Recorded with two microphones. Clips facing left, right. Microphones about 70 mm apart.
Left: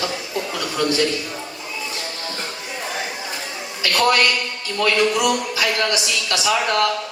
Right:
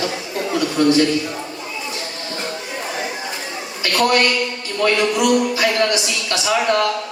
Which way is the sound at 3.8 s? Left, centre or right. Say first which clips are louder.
Right 1 dB; right.